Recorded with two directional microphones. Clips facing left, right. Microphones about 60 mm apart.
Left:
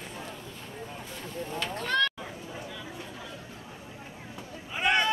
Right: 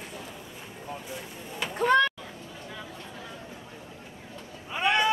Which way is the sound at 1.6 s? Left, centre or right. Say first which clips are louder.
Right 6 dB; centre.